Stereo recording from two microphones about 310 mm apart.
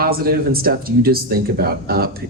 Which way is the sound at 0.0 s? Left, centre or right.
Right.